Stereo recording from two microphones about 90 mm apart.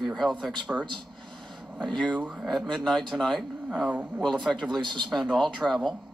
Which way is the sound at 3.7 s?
15° right (ahead or behind).